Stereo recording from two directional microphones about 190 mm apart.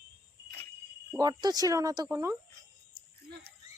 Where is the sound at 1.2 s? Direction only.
20° right (ahead or behind).